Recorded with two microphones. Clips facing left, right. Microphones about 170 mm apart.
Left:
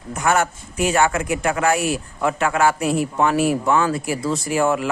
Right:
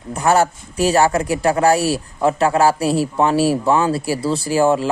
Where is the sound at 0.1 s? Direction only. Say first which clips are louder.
Right 4 dB; 35° right (ahead or behind).